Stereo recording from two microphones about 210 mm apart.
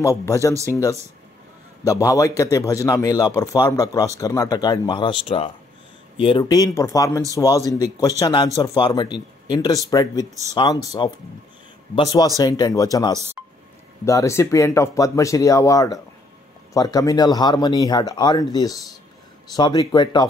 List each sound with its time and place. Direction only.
0.0 s a man's voice: 15° left (ahead or behind)
1.9 s a man's voice: 15° left (ahead or behind)
6.1 s a man's voice: 25° left (ahead or behind)